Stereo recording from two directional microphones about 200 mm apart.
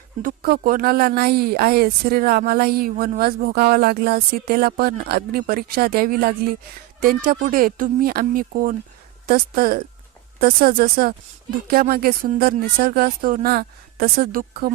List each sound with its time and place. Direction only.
0.2 s speech: 45° right (ahead or behind)